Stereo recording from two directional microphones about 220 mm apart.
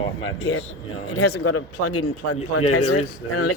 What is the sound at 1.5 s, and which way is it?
A man's voice, 90° left.